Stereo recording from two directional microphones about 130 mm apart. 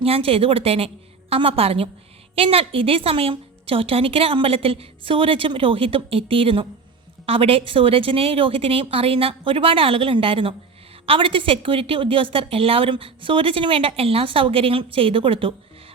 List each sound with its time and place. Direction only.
0.0 s a woman's voice: 45° right (ahead or behind)